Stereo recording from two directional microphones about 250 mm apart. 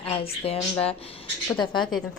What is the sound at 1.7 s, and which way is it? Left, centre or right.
Speech, centre.